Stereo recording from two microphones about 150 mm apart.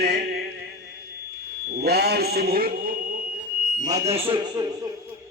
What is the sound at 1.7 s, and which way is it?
Speech, 90° right.